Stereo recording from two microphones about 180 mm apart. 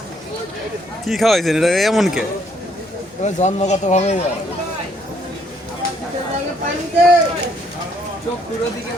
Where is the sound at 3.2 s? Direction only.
40° left (ahead or behind).